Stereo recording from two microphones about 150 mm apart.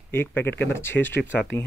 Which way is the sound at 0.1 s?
15° left (ahead or behind).